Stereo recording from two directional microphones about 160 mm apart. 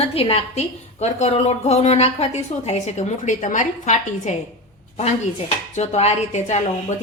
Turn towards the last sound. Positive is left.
turn(degrees=45)  # may be behind; listen again after turning